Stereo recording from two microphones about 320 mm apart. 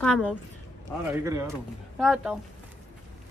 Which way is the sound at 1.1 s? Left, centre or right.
Centre.